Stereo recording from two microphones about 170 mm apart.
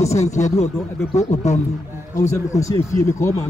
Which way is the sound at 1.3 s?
45° left (ahead or behind).